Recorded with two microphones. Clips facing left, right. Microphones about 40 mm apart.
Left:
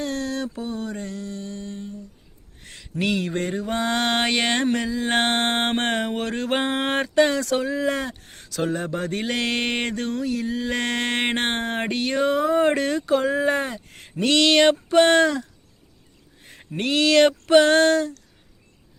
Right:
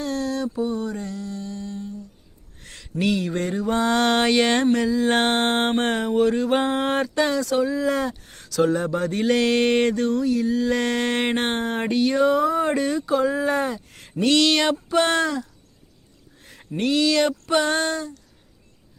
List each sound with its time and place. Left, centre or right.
0.0 s mantra: left
2.6 s a sound: centre
2.9 s speech: left
3.2 s mantra: left
3.6 s mantra: left
6.6 s mantra: left
8.4 s speech: left
9.3 s mantra: left
16.4 s a sound: left
16.9 s a sound: left